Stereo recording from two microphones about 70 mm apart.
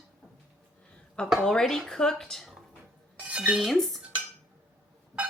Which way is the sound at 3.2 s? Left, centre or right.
Centre.